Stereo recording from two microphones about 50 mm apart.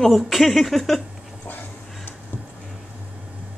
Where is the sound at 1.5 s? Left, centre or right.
Left.